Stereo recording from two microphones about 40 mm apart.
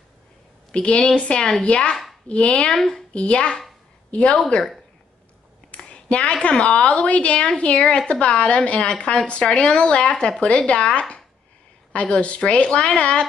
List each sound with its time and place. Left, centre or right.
0.7 s a woman's voice: left
2.7 s a woman's voice: centre
3.1 s speech: left
5.8 s a sound: left
6.5 s speech: left
7.8 s a woman's voice: centre
8.1 s a woman's voice: left